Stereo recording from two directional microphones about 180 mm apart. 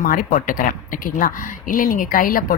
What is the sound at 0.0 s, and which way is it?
Speech, 50° left (ahead or behind).